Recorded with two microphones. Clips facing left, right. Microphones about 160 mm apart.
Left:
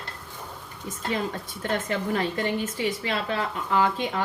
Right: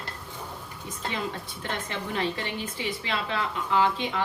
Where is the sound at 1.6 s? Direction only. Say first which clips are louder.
Left 7 dB; 45° left (ahead or behind).